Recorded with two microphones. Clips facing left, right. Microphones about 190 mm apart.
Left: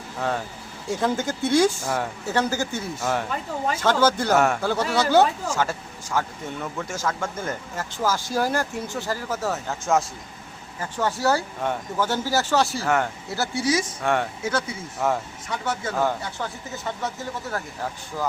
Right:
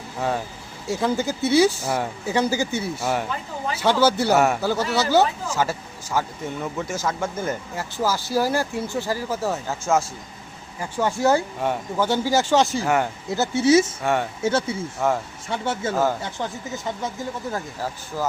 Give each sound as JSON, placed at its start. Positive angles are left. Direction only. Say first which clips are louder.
{"t": 0.2, "sound": "speech", "louder": "right 2 dB", "side_deg": -10}
{"t": 10.8, "sound": "speech", "louder": "right 2 dB", "side_deg": -15}
{"t": 14.0, "sound": "speech", "louder": "right 1 dB", "side_deg": -5}
{"t": 14.4, "sound": "speech", "louder": "right 4 dB", "side_deg": -25}
{"t": 15.0, "sound": "speech", "louder": "right 1 dB", "side_deg": 0}
{"t": 15.4, "sound": "speech", "louder": "right 3 dB", "side_deg": -25}